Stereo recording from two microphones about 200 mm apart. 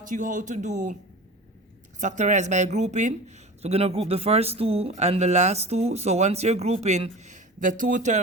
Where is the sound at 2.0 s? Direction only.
40° right (ahead or behind).